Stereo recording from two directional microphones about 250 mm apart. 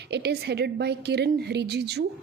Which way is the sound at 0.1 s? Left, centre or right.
Right.